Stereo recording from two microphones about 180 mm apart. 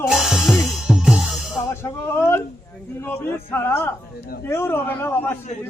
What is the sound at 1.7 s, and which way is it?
A man's voice, 15° left (ahead or behind).